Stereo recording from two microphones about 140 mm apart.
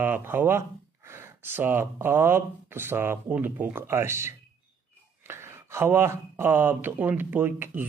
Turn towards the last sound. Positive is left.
turn(degrees=-15)  # may be behind; listen again after turning